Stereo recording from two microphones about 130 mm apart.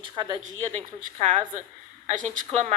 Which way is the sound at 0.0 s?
30° right (ahead or behind).